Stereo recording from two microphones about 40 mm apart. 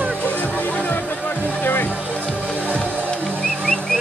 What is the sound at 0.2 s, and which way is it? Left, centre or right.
Music, left.